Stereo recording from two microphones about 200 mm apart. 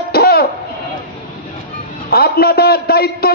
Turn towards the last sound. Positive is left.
turn(degrees=50)  # may be behind; listen again after turning